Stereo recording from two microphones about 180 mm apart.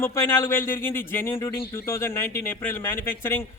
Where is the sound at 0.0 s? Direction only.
15° left (ahead or behind).